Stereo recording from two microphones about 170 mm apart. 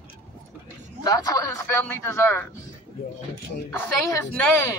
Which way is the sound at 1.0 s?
20° left (ahead or behind).